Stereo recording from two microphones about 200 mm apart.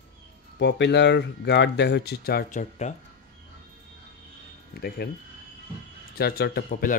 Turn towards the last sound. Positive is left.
turn(degrees=50)  # may be behind; listen again after turning